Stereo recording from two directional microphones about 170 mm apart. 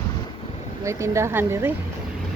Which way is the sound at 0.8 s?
15° right (ahead or behind).